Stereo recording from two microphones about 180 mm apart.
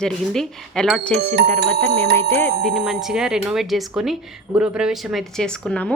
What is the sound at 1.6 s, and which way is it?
Music, 65° right (ahead or behind).